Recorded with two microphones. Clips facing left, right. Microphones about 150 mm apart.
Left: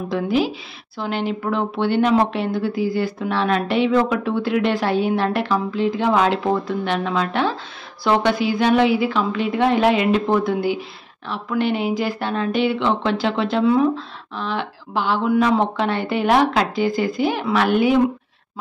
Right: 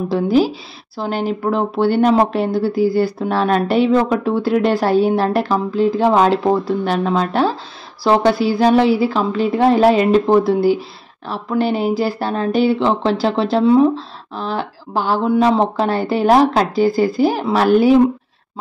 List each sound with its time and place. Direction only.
0.1 s speech: 40° right (ahead or behind)